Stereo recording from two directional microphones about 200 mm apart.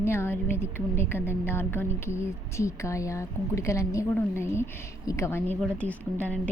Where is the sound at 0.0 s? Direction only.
10° left (ahead or behind).